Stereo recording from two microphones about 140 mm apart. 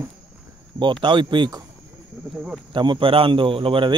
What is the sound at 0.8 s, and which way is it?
Speech, 35° right (ahead or behind).